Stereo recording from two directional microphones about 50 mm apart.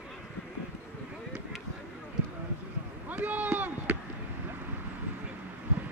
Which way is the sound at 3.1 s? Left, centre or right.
Right.